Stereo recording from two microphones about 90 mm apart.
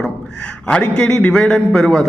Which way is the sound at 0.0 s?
10° left (ahead or behind).